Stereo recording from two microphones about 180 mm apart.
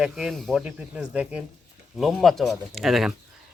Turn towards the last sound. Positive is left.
turn(degrees=0)  # may be behind; listen again after turning